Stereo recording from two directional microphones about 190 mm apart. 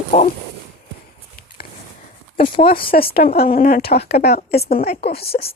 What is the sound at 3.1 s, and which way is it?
Speech, 55° left (ahead or behind).